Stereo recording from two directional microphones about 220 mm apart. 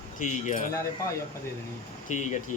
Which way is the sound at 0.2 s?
35° left (ahead or behind).